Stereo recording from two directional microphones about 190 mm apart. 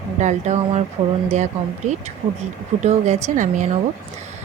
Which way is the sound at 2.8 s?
35° right (ahead or behind).